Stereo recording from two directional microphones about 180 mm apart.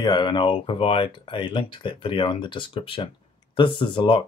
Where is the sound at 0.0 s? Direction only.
25° left (ahead or behind).